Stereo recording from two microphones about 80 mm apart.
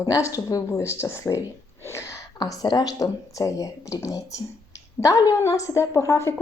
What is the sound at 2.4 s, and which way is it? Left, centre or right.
A woman's voice, left.